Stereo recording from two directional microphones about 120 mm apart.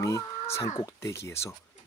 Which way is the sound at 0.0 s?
25° left (ahead or behind).